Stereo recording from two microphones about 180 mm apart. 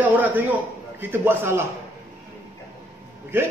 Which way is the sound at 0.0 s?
10° right (ahead or behind).